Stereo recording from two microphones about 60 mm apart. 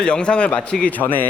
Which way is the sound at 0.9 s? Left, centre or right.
Left.